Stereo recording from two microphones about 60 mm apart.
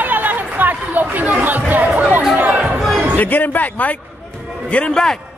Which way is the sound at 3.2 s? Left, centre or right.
Left.